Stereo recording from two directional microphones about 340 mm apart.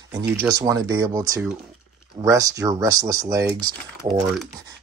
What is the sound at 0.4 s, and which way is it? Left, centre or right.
Speech, centre.